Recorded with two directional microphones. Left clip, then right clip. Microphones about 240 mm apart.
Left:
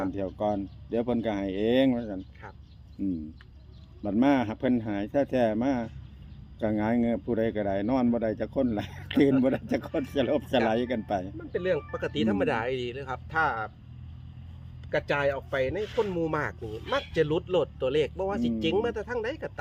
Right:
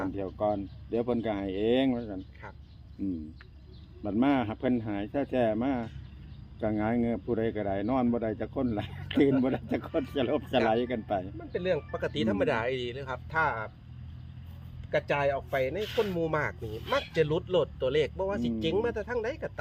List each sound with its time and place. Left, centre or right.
0.1 s speech: left
11.5 s speech: left
14.8 s speech: left